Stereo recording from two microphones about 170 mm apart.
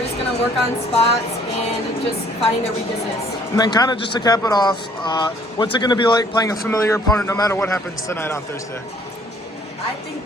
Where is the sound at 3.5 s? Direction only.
20° left (ahead or behind).